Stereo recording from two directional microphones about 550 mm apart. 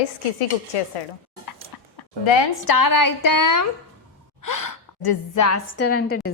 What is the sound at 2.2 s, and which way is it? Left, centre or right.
A woman's voice, left.